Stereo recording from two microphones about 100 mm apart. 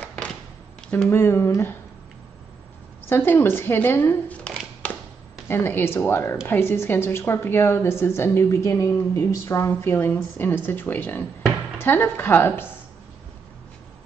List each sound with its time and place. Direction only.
0.0 s a sound: 10° left (ahead or behind)
0.8 s speech: 10° left (ahead or behind)
1.1 s a woman's voice: 25° left (ahead or behind)
3.1 s a woman's voice: 25° left (ahead or behind)
5.5 s a woman's voice: 20° left (ahead or behind)